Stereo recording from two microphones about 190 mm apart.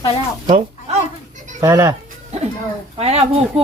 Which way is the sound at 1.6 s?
15° right (ahead or behind).